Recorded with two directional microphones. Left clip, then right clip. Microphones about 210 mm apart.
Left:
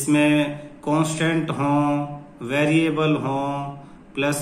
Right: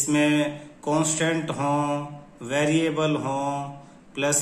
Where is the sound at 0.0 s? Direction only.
20° right (ahead or behind).